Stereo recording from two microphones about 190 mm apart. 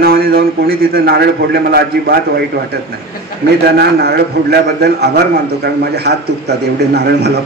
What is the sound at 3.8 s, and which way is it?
A man's voice, 55° right (ahead or behind).